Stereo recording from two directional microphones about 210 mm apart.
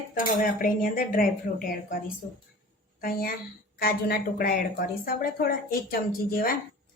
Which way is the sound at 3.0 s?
45° left (ahead or behind).